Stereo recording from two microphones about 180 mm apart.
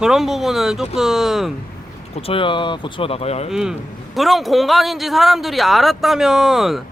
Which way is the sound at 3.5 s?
5° right (ahead or behind).